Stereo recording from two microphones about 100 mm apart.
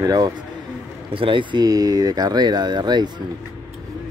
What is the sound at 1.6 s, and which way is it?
Speech, 40° right (ahead or behind).